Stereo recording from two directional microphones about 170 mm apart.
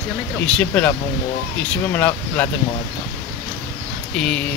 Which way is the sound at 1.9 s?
10° left (ahead or behind).